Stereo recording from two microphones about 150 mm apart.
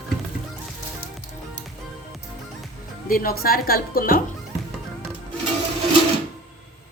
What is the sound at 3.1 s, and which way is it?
A woman's voice, 80° left.